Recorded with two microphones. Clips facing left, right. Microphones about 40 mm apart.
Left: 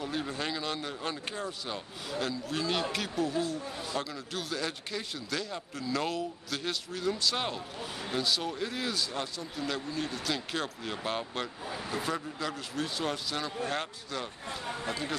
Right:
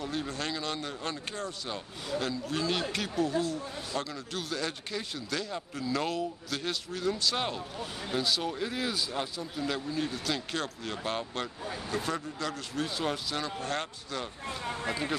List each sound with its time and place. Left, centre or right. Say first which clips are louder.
0.0 s a man's voice: even; centre